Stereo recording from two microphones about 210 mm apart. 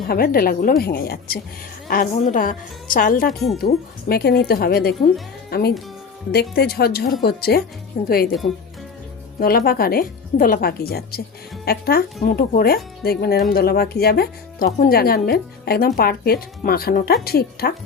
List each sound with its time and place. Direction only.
0.1 s a woman's voice: 45° left (ahead or behind)
3.2 s speech: centre (ahead or behind)
3.6 s speech: 50° left (ahead or behind)
9.4 s speech: 45° left (ahead or behind)